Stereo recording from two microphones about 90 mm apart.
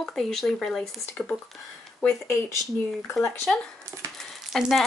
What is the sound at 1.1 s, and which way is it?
Speech, 25° left (ahead or behind).